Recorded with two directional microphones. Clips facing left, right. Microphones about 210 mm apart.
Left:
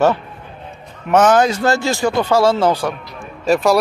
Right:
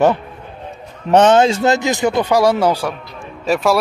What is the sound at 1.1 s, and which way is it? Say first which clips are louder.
Speech: right 2 dB; 25° right (ahead or behind).